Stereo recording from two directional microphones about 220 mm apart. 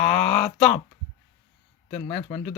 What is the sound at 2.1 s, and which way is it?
Speech, 20° left (ahead or behind).